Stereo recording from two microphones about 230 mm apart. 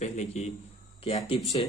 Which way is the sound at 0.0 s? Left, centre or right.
Left.